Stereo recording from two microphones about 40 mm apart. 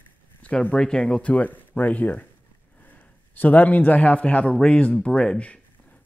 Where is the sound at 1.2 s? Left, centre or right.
Left.